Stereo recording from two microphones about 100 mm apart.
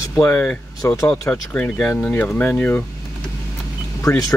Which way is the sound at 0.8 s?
30° left (ahead or behind).